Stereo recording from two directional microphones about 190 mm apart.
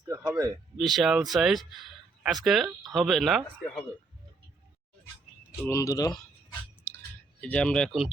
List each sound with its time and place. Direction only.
0.0 s a sound: 15° right (ahead or behind)
0.8 s speech: centre (ahead or behind)
5.5 s speech: 15° left (ahead or behind)
7.4 s speech: 5° left (ahead or behind)